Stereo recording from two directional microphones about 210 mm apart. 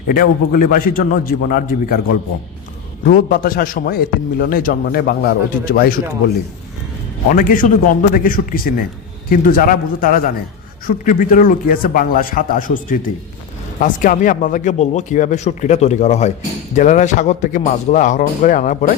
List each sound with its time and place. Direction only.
0.1 s a man's voice: 40° left (ahead or behind)
7.3 s speech: 40° left (ahead or behind)